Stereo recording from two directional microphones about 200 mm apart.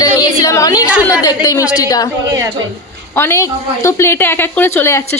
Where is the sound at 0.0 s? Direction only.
15° left (ahead or behind).